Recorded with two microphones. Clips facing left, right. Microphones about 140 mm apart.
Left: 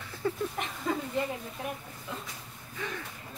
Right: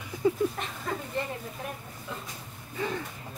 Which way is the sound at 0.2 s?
15° right (ahead or behind).